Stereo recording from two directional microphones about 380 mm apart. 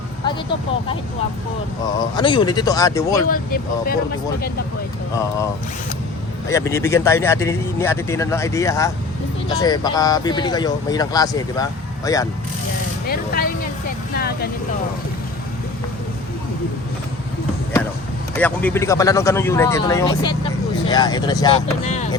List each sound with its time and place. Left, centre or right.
2.1 s speech: centre
3.2 s speech: left
6.5 s speech: centre
13.1 s speech: left
18.3 s speech: centre